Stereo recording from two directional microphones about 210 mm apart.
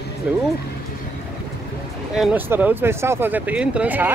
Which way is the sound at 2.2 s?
10° right (ahead or behind).